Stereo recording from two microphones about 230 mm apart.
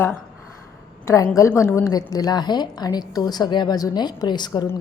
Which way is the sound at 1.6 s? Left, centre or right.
Centre.